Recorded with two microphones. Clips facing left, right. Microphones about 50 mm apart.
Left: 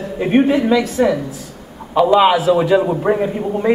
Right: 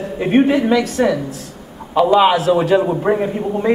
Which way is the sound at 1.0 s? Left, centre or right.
Right.